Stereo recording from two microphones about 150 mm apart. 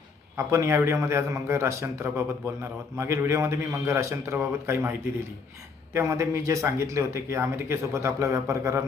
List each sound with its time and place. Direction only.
0.3 s a man's voice: 20° right (ahead or behind)